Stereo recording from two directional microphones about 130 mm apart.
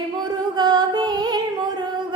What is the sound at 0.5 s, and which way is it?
Music, 30° right (ahead or behind).